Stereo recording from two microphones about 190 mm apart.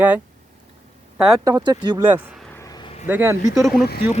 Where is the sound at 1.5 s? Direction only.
20° right (ahead or behind).